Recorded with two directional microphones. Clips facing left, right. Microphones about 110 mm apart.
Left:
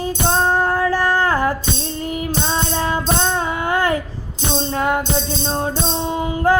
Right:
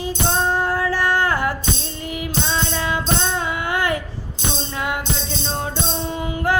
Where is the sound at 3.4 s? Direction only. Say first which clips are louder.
Left 3 dB; 40° left (ahead or behind).